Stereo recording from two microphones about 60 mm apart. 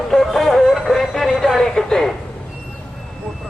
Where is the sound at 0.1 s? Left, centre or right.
Centre.